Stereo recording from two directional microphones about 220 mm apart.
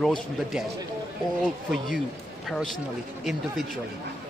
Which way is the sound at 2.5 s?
5° left (ahead or behind).